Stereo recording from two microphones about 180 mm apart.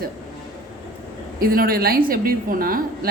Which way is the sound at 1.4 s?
55° right (ahead or behind).